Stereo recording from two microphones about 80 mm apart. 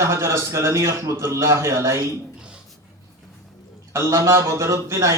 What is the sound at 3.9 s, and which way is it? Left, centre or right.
A man's voice, right.